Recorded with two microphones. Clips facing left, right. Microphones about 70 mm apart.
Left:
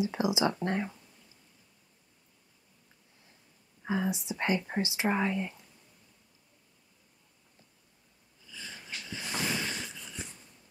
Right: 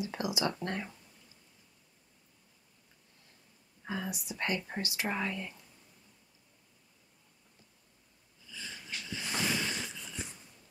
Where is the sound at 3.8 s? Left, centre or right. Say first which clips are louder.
Left 7 dB; centre.